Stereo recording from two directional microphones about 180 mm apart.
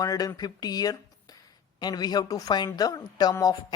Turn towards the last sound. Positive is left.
turn(degrees=20)  # may be behind; listen again after turning